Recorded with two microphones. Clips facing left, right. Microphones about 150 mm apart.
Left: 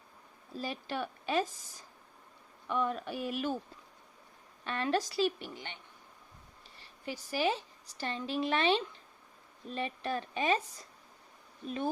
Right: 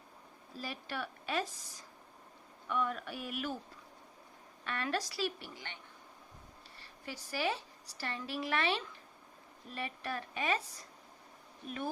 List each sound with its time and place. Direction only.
0.6 s a woman's voice: 20° left (ahead or behind)
2.6 s a woman's voice: 25° left (ahead or behind)
4.6 s a woman's voice: 25° left (ahead or behind)
7.0 s a woman's voice: 15° left (ahead or behind)